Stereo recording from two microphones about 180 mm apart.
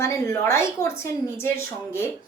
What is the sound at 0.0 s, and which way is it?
A woman's voice, 15° left (ahead or behind).